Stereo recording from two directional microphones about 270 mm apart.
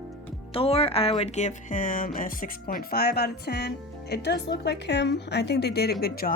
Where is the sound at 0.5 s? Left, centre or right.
Left.